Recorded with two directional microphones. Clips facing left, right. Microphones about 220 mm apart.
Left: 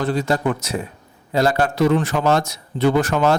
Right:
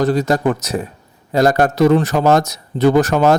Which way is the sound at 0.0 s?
40° right (ahead or behind).